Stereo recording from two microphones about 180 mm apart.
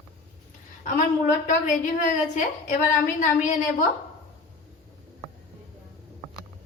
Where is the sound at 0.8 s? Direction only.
45° left (ahead or behind).